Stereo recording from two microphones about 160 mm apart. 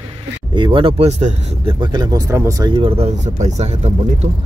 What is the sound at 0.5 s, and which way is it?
Speech, 30° right (ahead or behind).